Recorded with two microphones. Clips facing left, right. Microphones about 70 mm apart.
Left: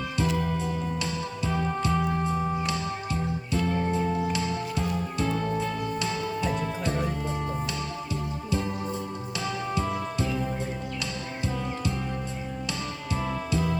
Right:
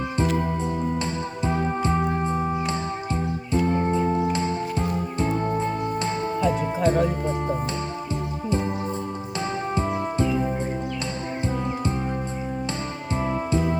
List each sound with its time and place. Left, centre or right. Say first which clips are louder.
0.2 s music: right 3 dB; right
8.4 s music: right 5 dB; right
9.7 s music: right 6 dB; right
13.2 s music: right 5 dB; right